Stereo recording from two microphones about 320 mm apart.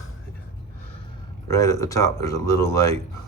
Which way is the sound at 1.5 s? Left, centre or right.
Centre.